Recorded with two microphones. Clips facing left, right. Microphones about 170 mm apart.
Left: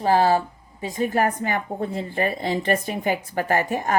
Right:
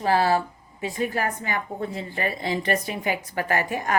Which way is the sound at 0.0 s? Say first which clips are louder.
Left 3 dB; 40° left (ahead or behind).